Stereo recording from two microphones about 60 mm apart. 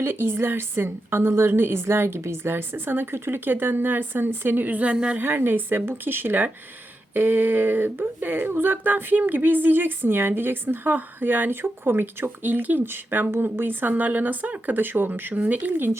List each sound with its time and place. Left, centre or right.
0.0 s speech: right; by 5.2 s centre
5.2 s speech: right